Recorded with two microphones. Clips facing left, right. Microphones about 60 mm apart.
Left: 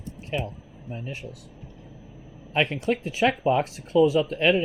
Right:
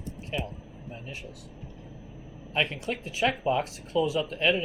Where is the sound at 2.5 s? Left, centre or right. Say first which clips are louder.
Left 5 dB; left.